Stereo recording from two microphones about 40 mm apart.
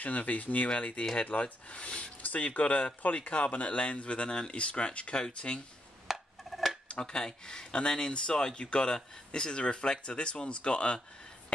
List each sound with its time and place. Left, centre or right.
0.0 s speech: left
2.2 s speech: left
6.0 s a sound: centre
6.9 s speech: left